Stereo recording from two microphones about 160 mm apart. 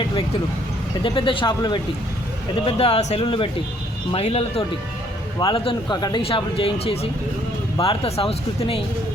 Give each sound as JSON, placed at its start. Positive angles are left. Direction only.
{"t": 1.0, "sound": "speech", "side_deg": 30}